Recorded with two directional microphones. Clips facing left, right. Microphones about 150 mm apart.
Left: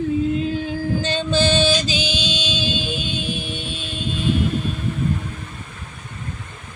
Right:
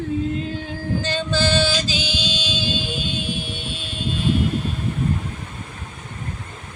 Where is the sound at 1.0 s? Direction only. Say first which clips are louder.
Left 1 dB; 20° left (ahead or behind).